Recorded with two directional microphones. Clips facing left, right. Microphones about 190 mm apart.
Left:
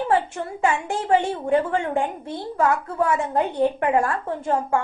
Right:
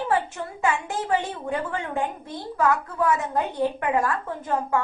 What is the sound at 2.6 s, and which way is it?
A woman's voice, 30° left (ahead or behind).